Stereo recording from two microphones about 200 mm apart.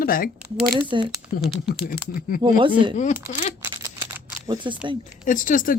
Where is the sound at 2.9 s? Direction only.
40° left (ahead or behind).